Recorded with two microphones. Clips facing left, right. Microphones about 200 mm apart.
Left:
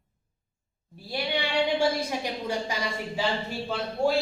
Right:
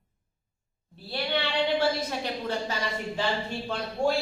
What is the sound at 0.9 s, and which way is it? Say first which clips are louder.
A woman's voice: even; 10° left (ahead or behind).